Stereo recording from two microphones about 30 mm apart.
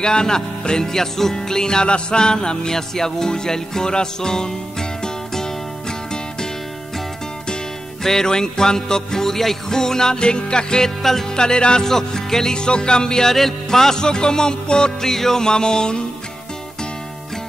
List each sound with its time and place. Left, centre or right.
0.0 s music: left
8.0 s music: centre
10.1 s music: left
11.0 s music: centre
11.3 s music: left
12.5 s music: left
15.0 s music: centre